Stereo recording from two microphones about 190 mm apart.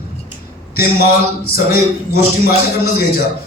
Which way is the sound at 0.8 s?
55° left (ahead or behind).